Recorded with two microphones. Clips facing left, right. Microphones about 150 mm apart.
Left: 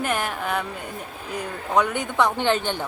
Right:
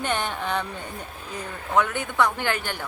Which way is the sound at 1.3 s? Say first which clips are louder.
Left 2 dB; 15° left (ahead or behind).